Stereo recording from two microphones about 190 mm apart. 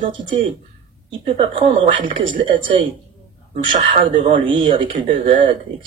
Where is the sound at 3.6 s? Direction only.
25° right (ahead or behind).